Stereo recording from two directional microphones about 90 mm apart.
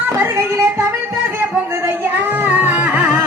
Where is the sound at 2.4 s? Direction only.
20° right (ahead or behind).